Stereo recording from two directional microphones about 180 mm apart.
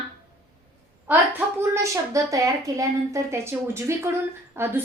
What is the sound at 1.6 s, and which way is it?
A woman's voice, 15° right (ahead or behind).